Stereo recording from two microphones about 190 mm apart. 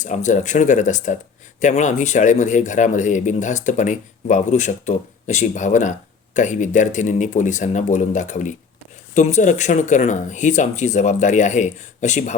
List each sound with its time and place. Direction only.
0.0 s speech: 40° left (ahead or behind)